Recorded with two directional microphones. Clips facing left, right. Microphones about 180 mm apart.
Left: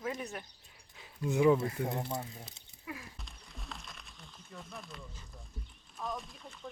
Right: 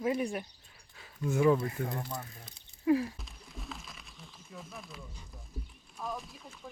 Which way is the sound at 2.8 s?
35° right (ahead or behind).